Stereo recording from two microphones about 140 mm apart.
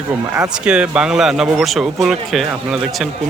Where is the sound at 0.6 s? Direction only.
5° right (ahead or behind).